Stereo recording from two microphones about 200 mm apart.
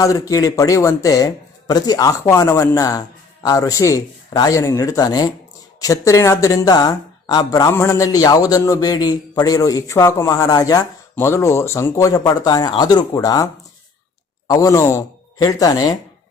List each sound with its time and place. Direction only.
0.0 s speech: 15° left (ahead or behind)